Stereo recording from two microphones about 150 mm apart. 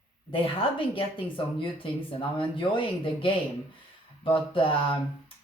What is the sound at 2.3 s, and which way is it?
Speech, 35° left (ahead or behind).